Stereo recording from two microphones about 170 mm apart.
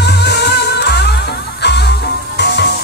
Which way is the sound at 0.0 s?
75° left (ahead or behind).